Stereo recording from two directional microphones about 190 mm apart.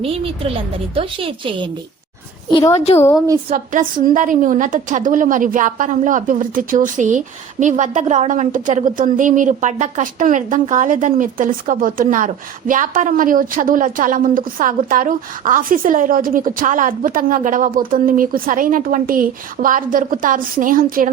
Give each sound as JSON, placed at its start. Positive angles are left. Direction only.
{"t": 0.0, "sound": "a woman's voice", "side_deg": -30}
{"t": 2.5, "sound": "a woman's voice", "side_deg": 20}
{"t": 2.7, "sound": "a woman's voice", "side_deg": 35}
{"t": 3.5, "sound": "a woman's voice", "side_deg": -45}